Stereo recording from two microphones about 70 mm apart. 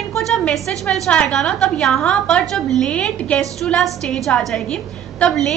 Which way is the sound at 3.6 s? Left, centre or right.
Centre.